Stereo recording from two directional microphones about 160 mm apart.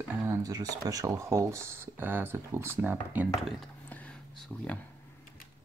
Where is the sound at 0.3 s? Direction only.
20° right (ahead or behind).